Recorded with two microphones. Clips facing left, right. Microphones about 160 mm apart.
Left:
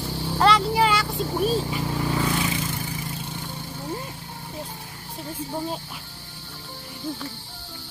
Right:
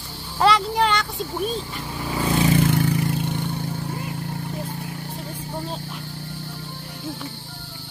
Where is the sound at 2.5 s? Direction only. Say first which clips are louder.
Right 10 dB; 65° right (ahead or behind).